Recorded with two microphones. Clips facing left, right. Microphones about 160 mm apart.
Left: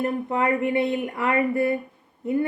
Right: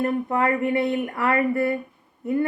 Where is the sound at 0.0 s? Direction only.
20° left (ahead or behind).